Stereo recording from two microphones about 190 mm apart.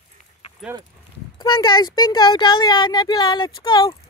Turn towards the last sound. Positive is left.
turn(degrees=20)  # may be behind; listen again after turning